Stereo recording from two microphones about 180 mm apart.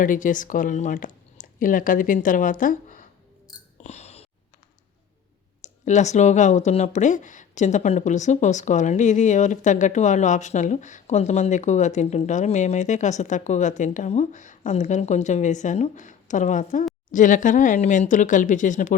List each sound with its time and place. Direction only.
0.0 s speech: 45° left (ahead or behind)
3.8 s a sound: 35° left (ahead or behind)
5.6 s speech: 40° left (ahead or behind)